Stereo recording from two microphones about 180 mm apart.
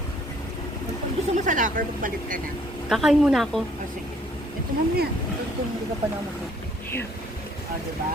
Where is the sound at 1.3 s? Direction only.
45° right (ahead or behind).